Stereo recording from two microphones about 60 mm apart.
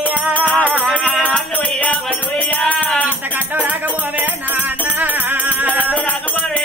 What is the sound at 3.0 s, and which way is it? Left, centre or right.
Music, right.